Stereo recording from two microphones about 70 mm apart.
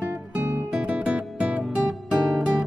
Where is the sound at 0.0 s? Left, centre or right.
Right.